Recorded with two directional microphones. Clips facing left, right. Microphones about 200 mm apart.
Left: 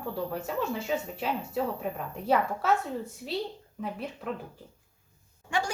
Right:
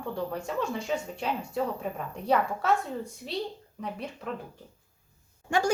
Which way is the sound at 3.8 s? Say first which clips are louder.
Left 1 dB; centre (ahead or behind).